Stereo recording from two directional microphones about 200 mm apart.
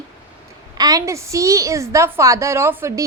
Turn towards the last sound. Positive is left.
turn(degrees=-15)  # may be behind; listen again after turning